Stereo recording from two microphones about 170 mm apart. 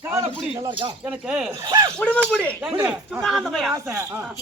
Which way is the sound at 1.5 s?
25° right (ahead or behind).